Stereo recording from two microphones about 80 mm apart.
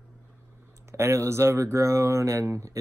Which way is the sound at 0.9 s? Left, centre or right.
Right.